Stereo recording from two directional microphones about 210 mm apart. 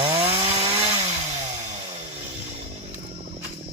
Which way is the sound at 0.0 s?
25° right (ahead or behind).